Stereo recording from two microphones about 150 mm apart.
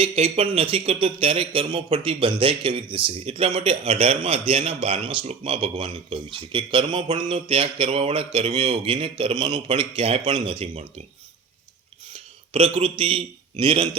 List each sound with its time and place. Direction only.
0.0 s speech: 40° right (ahead or behind)
12.1 s a man's voice: 35° right (ahead or behind)